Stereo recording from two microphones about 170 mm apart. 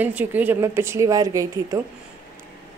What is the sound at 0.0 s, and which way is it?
A woman's voice, 10° right (ahead or behind).